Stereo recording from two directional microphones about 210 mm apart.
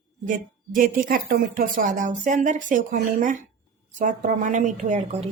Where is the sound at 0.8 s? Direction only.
40° right (ahead or behind).